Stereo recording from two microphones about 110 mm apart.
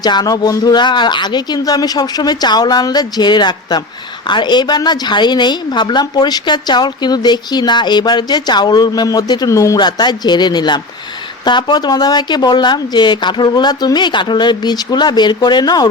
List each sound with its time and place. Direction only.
0.0 s a woman's voice: 40° left (ahead or behind)
9.7 s a woman's voice: 40° left (ahead or behind)